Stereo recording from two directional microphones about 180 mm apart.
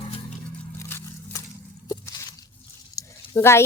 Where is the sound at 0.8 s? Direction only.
15° left (ahead or behind).